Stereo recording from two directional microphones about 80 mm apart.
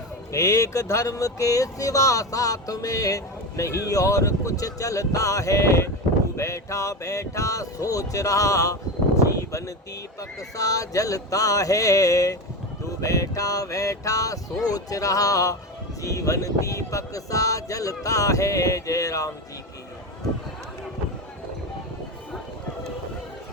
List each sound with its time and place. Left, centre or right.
0.3 s speech: left
9.2 s a sound: left
10.2 s speech: left